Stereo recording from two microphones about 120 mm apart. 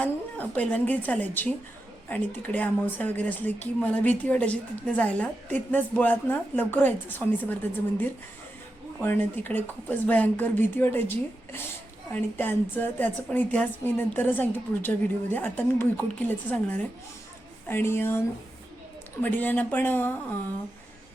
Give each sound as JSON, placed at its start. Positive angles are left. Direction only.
{"t": 0.0, "sound": "a woman's voice", "side_deg": 15}
{"t": 12.1, "sound": "a woman's voice", "side_deg": 15}
{"t": 19.2, "sound": "a woman's voice", "side_deg": 15}